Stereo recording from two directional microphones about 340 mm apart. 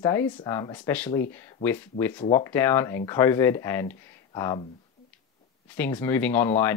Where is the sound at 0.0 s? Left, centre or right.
Centre.